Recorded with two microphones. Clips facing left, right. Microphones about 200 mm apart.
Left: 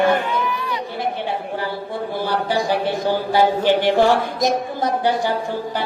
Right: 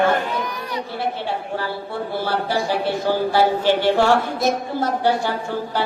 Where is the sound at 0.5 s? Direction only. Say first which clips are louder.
Left 4 dB; 40° right (ahead or behind).